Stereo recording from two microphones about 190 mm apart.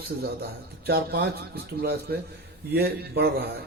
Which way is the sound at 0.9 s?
55° right (ahead or behind).